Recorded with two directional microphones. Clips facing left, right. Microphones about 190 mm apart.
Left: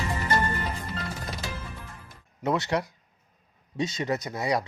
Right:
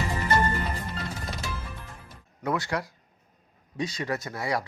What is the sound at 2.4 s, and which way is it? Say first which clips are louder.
Speech: left 2 dB; 25° left (ahead or behind).